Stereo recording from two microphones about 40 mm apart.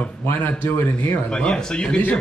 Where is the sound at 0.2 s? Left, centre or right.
Left.